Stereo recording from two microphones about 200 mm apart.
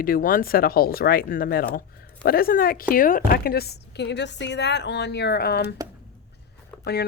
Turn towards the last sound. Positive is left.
turn(degrees=55)  # may be behind; listen again after turning